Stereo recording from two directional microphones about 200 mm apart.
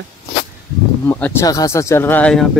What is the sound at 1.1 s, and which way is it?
Speech, 10° left (ahead or behind).